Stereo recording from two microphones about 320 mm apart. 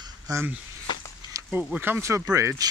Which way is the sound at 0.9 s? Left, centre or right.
Centre.